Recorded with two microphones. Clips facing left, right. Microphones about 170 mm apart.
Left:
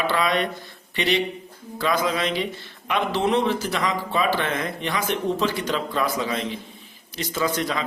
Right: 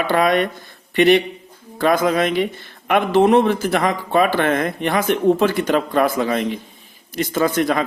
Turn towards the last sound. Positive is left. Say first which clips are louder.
# right 7 dB
turn(degrees=-50)  # may be behind; listen again after turning